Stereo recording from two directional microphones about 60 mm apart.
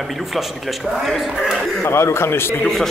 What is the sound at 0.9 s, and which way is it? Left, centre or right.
Speech, centre.